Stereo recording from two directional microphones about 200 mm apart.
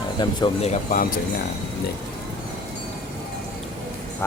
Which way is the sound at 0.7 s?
40° left (ahead or behind).